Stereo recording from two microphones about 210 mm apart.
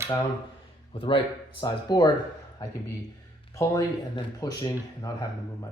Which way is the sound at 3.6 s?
15° left (ahead or behind).